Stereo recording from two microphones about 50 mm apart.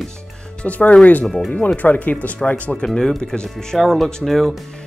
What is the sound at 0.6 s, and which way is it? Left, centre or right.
Speech, left.